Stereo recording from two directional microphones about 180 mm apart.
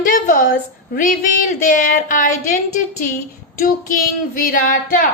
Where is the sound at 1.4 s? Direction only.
45° left (ahead or behind).